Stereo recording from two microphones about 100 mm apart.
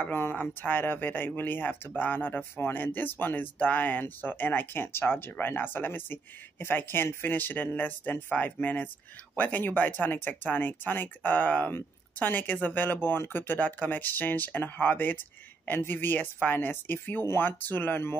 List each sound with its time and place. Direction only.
0.0 s speech: 20° left (ahead or behind)